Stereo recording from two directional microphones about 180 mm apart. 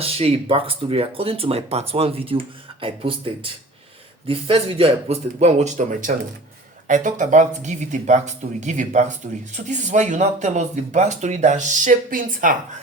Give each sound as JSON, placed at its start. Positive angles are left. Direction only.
{"t": 0.0, "sound": "speech", "side_deg": -30}